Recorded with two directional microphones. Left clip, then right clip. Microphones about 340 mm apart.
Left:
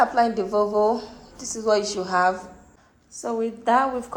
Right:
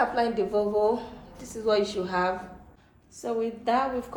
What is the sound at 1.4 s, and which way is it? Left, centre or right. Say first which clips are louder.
Speech: left 6 dB; centre.